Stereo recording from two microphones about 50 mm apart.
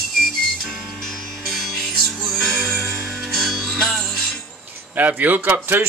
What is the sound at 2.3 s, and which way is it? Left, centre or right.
Music, centre.